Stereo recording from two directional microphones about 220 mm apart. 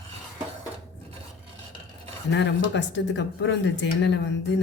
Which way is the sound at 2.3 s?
55° left (ahead or behind).